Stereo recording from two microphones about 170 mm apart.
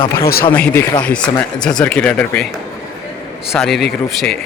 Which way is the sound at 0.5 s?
10° left (ahead or behind).